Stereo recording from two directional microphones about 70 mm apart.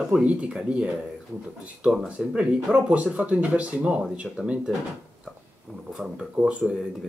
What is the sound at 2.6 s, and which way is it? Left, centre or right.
Speech, centre.